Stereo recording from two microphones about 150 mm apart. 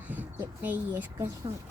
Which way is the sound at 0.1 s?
10° right (ahead or behind).